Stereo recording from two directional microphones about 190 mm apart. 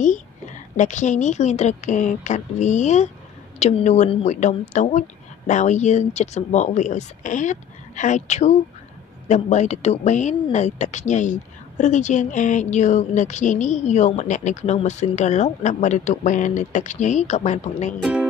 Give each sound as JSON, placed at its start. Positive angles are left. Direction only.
{"t": 0.7, "sound": "speech", "side_deg": 40}
{"t": 18.0, "sound": "speech", "side_deg": -5}